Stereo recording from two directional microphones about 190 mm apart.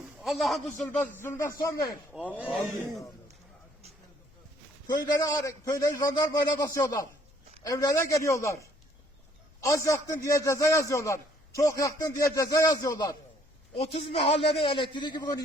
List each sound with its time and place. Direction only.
0.2 s a man's voice: centre (ahead or behind)
1.1 s a man's voice: 15° left (ahead or behind)
2.4 s a man's voice: 5° right (ahead or behind)
4.9 s a man's voice: 20° left (ahead or behind)